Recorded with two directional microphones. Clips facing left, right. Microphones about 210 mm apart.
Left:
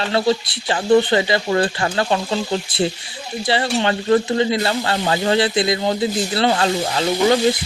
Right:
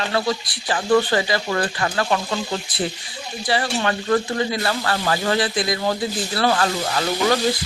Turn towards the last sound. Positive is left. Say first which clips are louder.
# left 3 dB
turn(degrees=25)  # may be behind; listen again after turning